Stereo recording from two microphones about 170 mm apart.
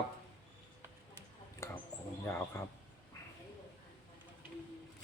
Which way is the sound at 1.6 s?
15° left (ahead or behind).